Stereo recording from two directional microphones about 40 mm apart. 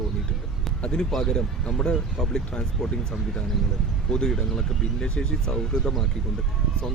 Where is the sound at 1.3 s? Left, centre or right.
Centre.